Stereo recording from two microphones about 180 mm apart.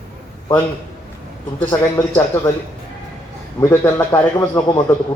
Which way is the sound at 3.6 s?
15° left (ahead or behind).